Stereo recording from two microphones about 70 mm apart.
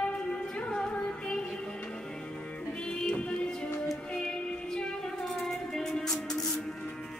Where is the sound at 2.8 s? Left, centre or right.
Centre.